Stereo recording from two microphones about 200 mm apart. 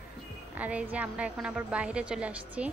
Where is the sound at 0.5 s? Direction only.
5° right (ahead or behind).